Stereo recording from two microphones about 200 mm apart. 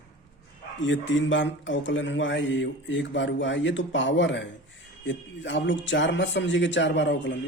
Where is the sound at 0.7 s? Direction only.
65° left (ahead or behind).